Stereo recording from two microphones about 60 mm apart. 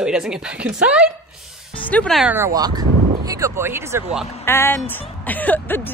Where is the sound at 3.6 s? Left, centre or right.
Right.